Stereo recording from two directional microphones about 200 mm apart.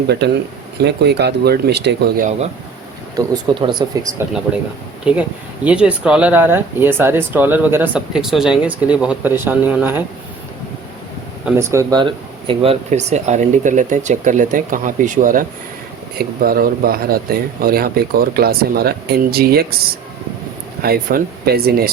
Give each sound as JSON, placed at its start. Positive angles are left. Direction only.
{"t": 0.8, "sound": "speech", "side_deg": -55}
{"t": 3.2, "sound": "speech", "side_deg": -20}
{"t": 5.1, "sound": "speech", "side_deg": -5}
{"t": 11.4, "sound": "speech", "side_deg": -15}
{"t": 12.5, "sound": "speech", "side_deg": -30}
{"t": 20.8, "sound": "speech", "side_deg": -50}